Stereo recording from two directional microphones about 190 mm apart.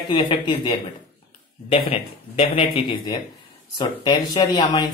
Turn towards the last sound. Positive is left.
turn(degrees=25)  # may be behind; listen again after turning